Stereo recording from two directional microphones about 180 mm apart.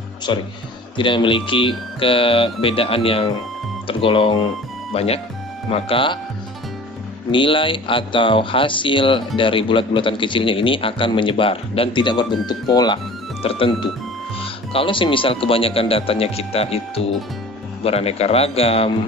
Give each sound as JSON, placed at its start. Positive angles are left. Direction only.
{"t": 0.3, "sound": "a man's voice", "side_deg": 25}
{"t": 7.2, "sound": "a man's voice", "side_deg": 30}